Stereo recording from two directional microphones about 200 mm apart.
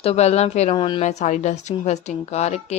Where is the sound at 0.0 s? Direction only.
30° left (ahead or behind).